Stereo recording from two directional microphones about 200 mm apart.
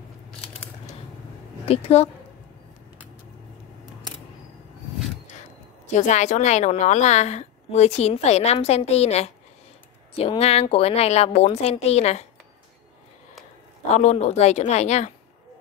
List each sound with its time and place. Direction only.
1.7 s a woman's voice: 30° left (ahead or behind)
5.9 s a woman's voice: 35° left (ahead or behind)
13.9 s a woman's voice: 35° left (ahead or behind)